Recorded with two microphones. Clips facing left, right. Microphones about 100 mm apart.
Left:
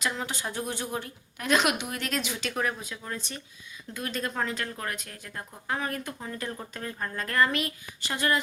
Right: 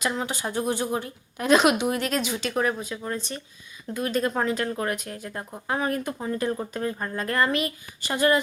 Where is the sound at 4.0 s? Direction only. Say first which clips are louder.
Right 6 dB; 5° right (ahead or behind).